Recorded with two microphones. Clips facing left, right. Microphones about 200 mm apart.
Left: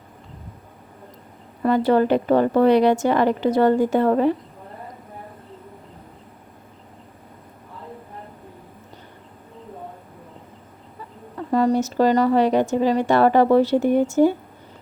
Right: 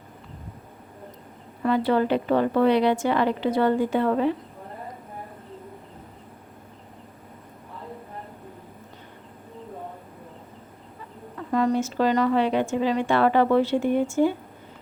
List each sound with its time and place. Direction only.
1.6 s a woman's voice: 45° left (ahead or behind)
11.3 s a woman's voice: 35° left (ahead or behind)